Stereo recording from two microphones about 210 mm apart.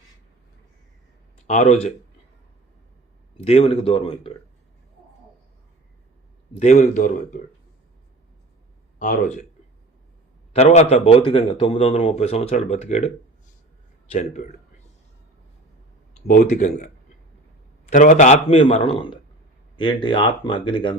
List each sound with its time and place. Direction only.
1.5 s a man's voice: 35° left (ahead or behind)
3.3 s speech: 30° left (ahead or behind)
6.6 s a man's voice: 35° left (ahead or behind)
9.0 s a man's voice: 40° left (ahead or behind)
10.5 s a man's voice: 30° left (ahead or behind)
14.1 s a man's voice: 35° left (ahead or behind)
16.1 s a man's voice: 35° left (ahead or behind)